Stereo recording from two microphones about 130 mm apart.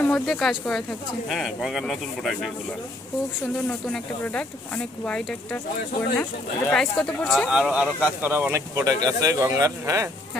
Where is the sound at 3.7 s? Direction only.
5° left (ahead or behind).